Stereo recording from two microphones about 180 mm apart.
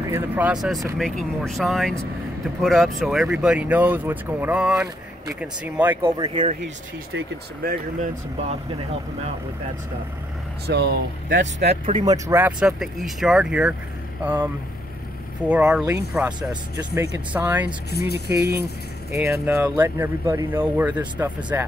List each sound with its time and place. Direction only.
0.0 s speech: 10° right (ahead or behind)
6.1 s speech: 25° right (ahead or behind)
7.6 s speech: 55° right (ahead or behind)
10.7 s speech: 65° right (ahead or behind)
11.7 s speech: 30° right (ahead or behind); by 17.7 s 10° right (ahead or behind)
17.9 s speech: 65° left (ahead or behind)
18.4 s speech: 65° right (ahead or behind)
19.1 s speech: centre (ahead or behind)